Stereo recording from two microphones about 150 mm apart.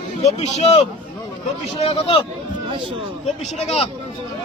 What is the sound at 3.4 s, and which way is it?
Speech, 45° left (ahead or behind).